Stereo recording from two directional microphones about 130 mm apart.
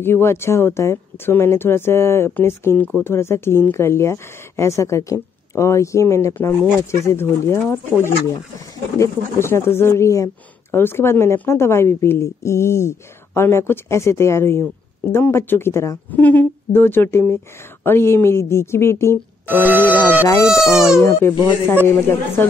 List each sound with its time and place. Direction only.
0.0 s speech: 20° left (ahead or behind)
19.4 s speech: 15° right (ahead or behind)
20.2 s speech: 20° left (ahead or behind)
20.5 s speech: 5° right (ahead or behind)
21.0 s speech: 20° left (ahead or behind)